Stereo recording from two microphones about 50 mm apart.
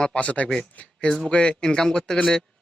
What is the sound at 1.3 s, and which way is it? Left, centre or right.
Speech, left.